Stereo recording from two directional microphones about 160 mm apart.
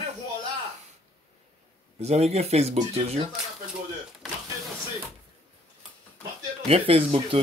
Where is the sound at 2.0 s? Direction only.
40° right (ahead or behind).